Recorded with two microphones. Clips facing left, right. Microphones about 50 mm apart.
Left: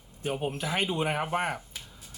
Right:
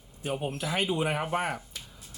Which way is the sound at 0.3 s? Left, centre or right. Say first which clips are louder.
Even; centre.